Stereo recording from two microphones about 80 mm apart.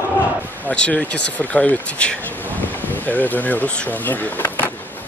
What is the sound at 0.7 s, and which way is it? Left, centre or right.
Speech, centre.